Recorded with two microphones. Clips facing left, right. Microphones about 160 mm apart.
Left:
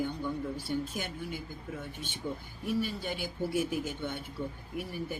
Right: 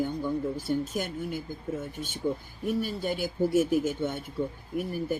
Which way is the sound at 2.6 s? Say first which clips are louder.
Right 4 dB; 45° right (ahead or behind).